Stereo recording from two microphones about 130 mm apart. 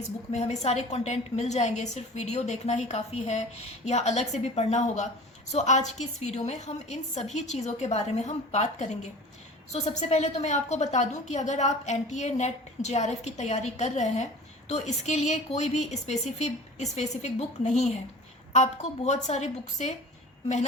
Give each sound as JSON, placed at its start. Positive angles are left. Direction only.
{"t": 0.3, "sound": "a woman's voice", "side_deg": 55}